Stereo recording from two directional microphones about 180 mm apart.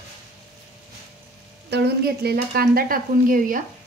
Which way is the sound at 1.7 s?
65° right (ahead or behind).